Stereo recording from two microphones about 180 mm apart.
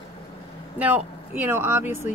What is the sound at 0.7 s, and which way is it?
Speech, 10° right (ahead or behind).